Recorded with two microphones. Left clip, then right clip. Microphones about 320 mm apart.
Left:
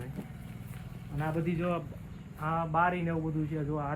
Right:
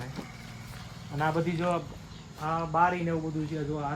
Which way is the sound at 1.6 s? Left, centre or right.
Centre.